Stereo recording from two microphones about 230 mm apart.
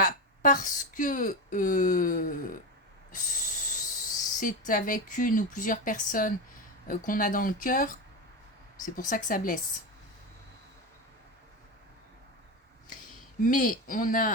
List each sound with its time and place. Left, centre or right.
0.0 s speech: left
3.1 s a sound: left
4.4 s speech: left
13.4 s speech: left